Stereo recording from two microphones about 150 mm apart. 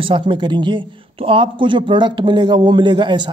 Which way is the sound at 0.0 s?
35° right (ahead or behind).